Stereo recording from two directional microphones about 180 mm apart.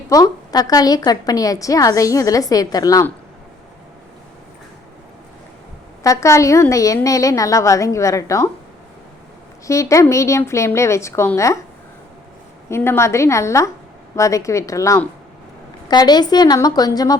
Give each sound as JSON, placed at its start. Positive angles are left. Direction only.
{"t": 0.1, "sound": "a woman's voice", "side_deg": 20}
{"t": 6.0, "sound": "a woman's voice", "side_deg": 15}
{"t": 9.6, "sound": "a woman's voice", "side_deg": 15}
{"t": 12.6, "sound": "a woman's voice", "side_deg": 15}